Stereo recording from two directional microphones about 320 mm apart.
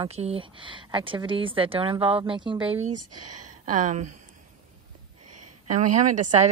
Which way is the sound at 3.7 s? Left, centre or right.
Right.